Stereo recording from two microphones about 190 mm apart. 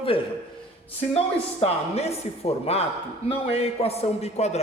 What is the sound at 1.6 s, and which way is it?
A man's voice, 35° left (ahead or behind).